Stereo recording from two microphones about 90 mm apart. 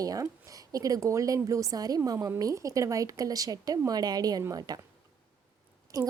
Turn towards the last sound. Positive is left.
turn(degrees=-40)  # may be behind; listen again after turning